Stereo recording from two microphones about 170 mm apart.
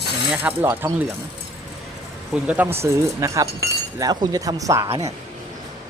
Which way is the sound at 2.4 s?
10° right (ahead or behind).